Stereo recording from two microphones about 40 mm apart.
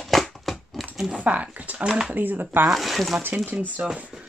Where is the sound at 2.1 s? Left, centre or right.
Right.